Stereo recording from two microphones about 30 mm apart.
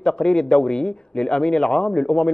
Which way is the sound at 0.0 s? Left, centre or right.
Left.